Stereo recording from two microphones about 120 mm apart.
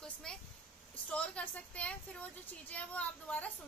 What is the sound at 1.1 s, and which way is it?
A woman's voice, 10° left (ahead or behind).